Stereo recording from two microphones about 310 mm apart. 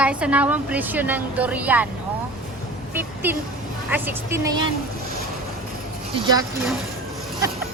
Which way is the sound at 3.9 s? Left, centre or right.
Centre.